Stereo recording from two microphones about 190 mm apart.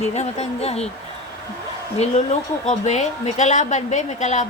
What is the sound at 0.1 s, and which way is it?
Speech, 35° left (ahead or behind).